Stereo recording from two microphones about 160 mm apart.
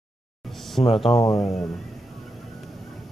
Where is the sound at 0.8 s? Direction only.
35° left (ahead or behind).